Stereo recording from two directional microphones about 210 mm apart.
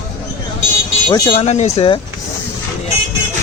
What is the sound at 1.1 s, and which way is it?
Speech, 25° left (ahead or behind).